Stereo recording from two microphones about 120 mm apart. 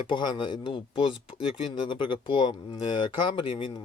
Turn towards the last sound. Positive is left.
turn(degrees=45)  # may be behind; listen again after turning